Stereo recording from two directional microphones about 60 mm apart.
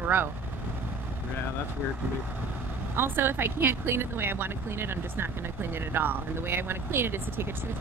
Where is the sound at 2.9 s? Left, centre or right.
Right.